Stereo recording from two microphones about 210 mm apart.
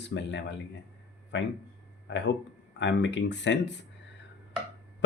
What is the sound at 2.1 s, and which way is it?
Speech, 60° left (ahead or behind).